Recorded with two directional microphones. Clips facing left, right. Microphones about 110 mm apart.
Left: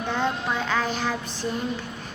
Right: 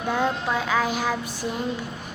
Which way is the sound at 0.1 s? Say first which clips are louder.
Right 3 dB; 5° right (ahead or behind).